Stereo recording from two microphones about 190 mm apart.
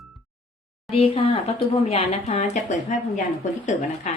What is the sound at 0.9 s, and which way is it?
A woman's voice, 30° left (ahead or behind).